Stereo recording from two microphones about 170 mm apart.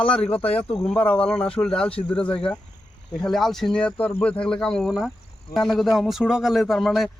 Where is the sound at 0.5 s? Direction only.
5° left (ahead or behind).